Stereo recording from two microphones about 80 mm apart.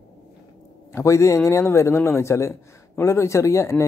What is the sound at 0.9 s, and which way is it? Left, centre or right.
A man's voice, left.